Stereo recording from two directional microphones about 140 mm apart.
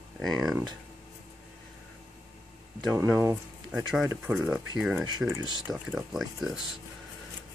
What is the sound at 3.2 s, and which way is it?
Speech, 20° right (ahead or behind).